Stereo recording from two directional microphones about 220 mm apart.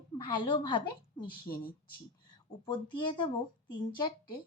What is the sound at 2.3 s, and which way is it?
Speech, 20° left (ahead or behind).